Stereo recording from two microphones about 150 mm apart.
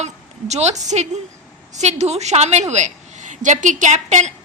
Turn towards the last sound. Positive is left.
turn(degrees=-50)  # may be behind; listen again after turning